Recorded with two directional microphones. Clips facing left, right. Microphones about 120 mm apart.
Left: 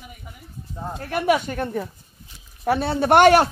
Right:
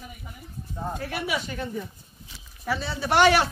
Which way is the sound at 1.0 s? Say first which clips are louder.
Left 12 dB; 50° left (ahead or behind).